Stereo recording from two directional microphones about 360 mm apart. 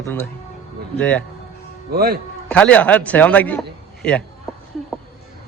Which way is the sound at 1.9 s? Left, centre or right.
Right.